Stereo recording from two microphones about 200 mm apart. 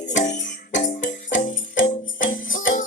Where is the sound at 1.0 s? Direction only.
70° left (ahead or behind).